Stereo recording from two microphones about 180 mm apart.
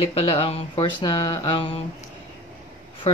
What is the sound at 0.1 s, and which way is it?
Speech, 35° left (ahead or behind).